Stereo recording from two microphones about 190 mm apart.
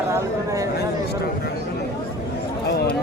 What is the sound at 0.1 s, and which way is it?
Speech, 15° right (ahead or behind).